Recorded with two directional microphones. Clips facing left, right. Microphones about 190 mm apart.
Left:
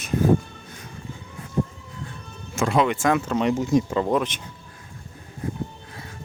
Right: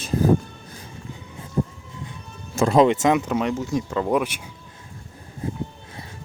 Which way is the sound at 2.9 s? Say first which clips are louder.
Right 2 dB; 20° right (ahead or behind).